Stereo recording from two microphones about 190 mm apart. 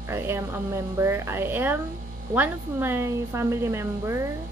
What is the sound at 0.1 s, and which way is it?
A woman's voice, 15° right (ahead or behind).